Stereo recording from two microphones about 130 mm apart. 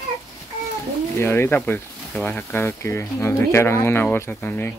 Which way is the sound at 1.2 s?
20° left (ahead or behind).